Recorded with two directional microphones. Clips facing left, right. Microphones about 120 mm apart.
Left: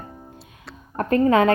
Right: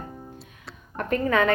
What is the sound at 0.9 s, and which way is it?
Speech, 35° left (ahead or behind).